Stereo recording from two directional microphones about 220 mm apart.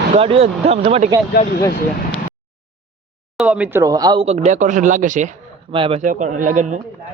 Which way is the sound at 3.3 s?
5° right (ahead or behind).